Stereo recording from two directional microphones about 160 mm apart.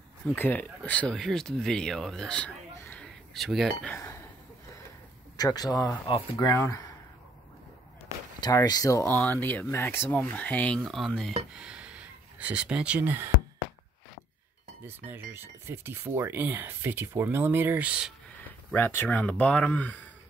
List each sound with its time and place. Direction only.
0.3 s speech: 10° left (ahead or behind)
5.4 s speech: 25° left (ahead or behind)
8.4 s speech: 25° left (ahead or behind); by 13.3 s 15° right (ahead or behind)
14.9 s speech: 15° right (ahead or behind)
18.7 s speech: 15° left (ahead or behind)